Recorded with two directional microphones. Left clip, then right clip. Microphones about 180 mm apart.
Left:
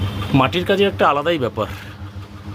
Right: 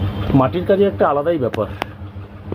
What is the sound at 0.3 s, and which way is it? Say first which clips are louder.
Speech: right 1 dB; 15° left (ahead or behind).